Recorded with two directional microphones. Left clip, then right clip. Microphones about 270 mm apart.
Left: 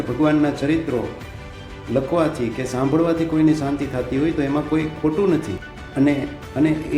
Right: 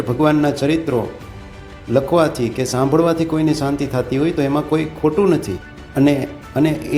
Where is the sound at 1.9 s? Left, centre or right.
Centre.